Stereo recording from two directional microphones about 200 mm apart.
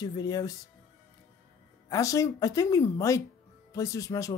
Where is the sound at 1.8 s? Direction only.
15° left (ahead or behind).